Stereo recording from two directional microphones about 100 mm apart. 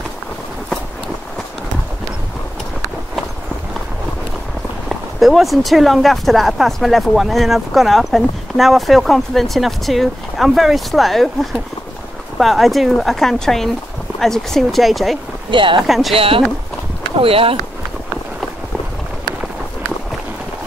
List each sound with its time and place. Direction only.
4.8 s speech: centre (ahead or behind)
15.5 s speech: 55° right (ahead or behind)
15.9 s speech: centre (ahead or behind)
16.2 s speech: 70° right (ahead or behind)